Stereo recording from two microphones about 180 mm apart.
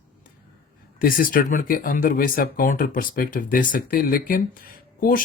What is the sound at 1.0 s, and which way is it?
Speech, 50° left (ahead or behind).